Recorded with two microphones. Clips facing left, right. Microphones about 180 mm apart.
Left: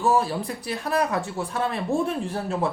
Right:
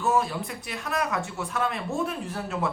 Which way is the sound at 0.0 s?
35° left (ahead or behind).